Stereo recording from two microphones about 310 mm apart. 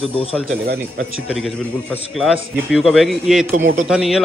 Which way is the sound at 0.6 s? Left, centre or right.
Right.